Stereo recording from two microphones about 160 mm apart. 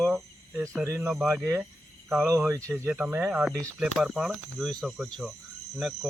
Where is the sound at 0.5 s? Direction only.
15° right (ahead or behind).